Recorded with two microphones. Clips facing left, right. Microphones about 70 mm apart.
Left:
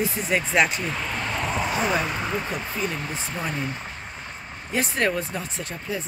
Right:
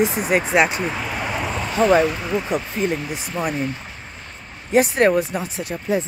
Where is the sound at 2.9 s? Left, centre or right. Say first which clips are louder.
Right 4 dB; centre.